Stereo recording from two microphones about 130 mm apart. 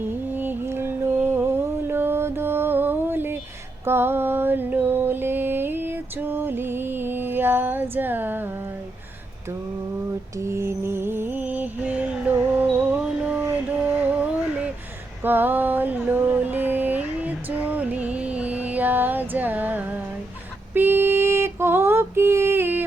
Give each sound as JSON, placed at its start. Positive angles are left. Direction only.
{"t": 0.0, "sound": "music", "side_deg": -15}
{"t": 3.8, "sound": "mantra", "side_deg": -15}
{"t": 10.3, "sound": "music", "side_deg": -20}
{"t": 15.2, "sound": "a sound", "side_deg": -15}
{"t": 20.7, "sound": "music", "side_deg": -15}